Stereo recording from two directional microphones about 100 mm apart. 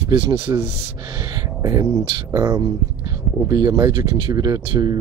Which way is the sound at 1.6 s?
35° right (ahead or behind).